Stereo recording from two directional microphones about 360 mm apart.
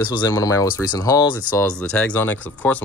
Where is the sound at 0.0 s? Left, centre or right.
Centre.